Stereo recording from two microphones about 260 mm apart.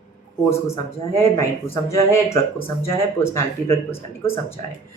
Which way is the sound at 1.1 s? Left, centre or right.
Centre.